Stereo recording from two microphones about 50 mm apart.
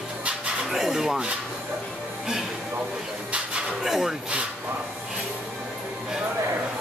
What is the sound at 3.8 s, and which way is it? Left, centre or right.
Speech, centre.